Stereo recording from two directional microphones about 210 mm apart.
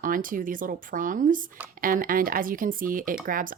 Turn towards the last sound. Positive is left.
turn(degrees=-40)  # may be behind; listen again after turning